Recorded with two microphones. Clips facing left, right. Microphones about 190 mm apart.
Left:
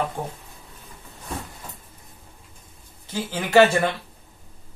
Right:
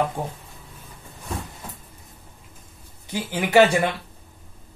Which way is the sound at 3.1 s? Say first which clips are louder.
Right 1 dB; 15° right (ahead or behind).